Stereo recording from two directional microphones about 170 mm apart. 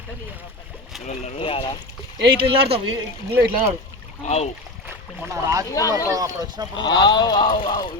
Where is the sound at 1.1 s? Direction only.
35° left (ahead or behind).